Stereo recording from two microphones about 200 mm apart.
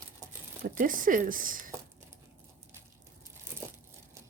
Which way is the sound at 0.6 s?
40° right (ahead or behind).